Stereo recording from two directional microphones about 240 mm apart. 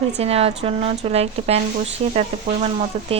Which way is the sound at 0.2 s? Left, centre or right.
Right.